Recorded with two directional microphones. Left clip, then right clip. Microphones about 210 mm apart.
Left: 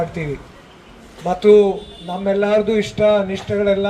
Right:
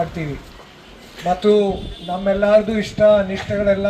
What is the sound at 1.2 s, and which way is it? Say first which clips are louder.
A man's voice: left 4 dB; 25° left (ahead or behind).